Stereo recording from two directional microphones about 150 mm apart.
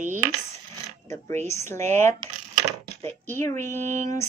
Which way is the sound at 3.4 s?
20° left (ahead or behind).